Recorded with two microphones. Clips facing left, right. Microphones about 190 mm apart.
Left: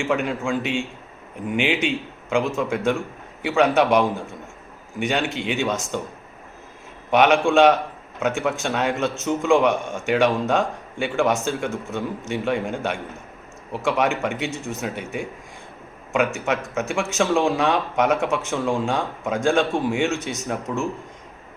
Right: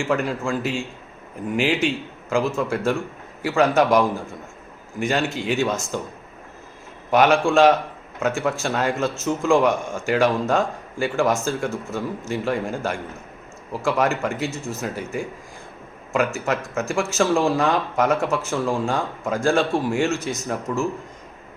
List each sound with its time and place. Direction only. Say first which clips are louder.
0.0 s speech: even; centre (ahead or behind)
7.1 s speech: even; 5° right (ahead or behind)
14.0 s speech: right 1 dB; 5° right (ahead or behind)
20.7 s speech: right 2 dB; 5° left (ahead or behind)